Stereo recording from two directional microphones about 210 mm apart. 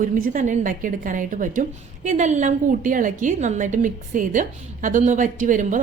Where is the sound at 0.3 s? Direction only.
35° right (ahead or behind).